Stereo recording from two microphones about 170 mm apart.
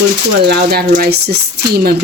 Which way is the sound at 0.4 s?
70° right (ahead or behind).